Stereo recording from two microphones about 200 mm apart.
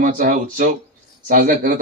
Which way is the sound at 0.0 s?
45° right (ahead or behind).